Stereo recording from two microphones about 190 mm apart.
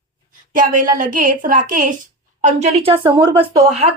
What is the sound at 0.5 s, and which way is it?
A woman's voice, 45° right (ahead or behind).